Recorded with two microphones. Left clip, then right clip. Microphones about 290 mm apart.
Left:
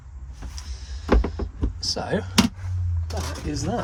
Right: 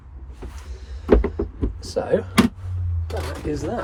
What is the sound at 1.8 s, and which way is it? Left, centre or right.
Speech, centre.